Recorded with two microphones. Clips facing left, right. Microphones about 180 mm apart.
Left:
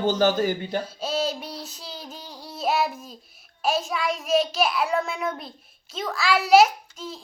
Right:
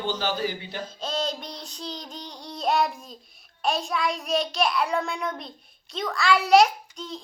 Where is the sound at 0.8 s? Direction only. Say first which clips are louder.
Left 3 dB; 10° left (ahead or behind).